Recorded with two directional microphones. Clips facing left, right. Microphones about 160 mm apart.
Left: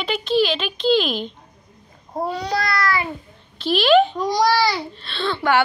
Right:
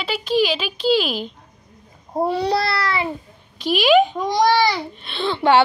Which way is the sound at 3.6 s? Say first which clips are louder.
Even; 10° right (ahead or behind).